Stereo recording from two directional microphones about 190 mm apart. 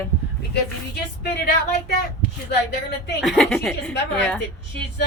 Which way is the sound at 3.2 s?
Centre (ahead or behind).